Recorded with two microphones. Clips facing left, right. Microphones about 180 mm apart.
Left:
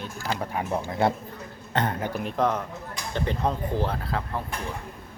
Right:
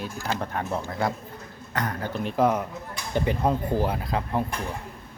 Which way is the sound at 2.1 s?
10° left (ahead or behind).